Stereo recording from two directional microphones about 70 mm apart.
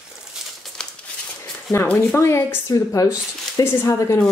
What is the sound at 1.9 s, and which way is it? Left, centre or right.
Speech, left.